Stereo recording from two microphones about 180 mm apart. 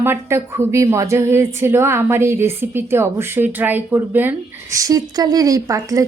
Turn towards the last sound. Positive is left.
turn(degrees=-20)  # may be behind; listen again after turning